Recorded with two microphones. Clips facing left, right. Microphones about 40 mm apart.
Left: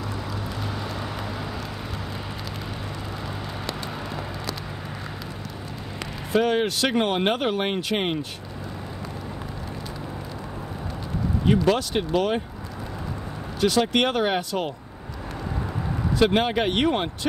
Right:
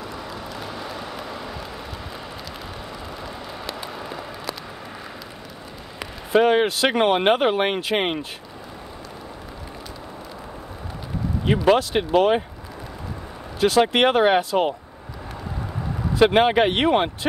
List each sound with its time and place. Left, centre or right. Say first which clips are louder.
0.7 s vehicle: left 1 dB; centre
6.3 s speech: right 4 dB; right
11.4 s speech: right 3 dB; right
13.6 s speech: right 4 dB; right
16.2 s speech: right 5 dB; right